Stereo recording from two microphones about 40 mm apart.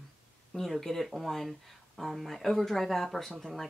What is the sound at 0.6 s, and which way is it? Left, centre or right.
Speech, centre.